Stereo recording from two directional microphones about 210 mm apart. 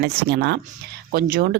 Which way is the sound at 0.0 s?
55° right (ahead or behind).